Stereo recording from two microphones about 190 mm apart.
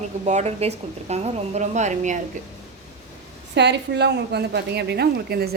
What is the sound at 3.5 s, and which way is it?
A woman's voice, 65° right (ahead or behind).